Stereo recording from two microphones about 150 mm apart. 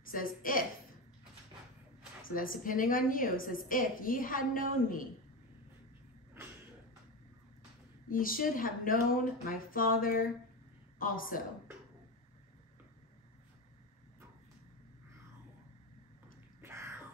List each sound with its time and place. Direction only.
0.1 s a woman's voice: 65° left (ahead or behind)
2.3 s a woman's voice: 65° left (ahead or behind)
8.1 s a woman's voice: 70° left (ahead or behind)
16.6 s crow: 15° right (ahead or behind)